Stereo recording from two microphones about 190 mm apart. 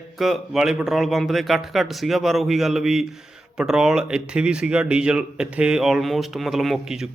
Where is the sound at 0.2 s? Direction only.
Centre (ahead or behind).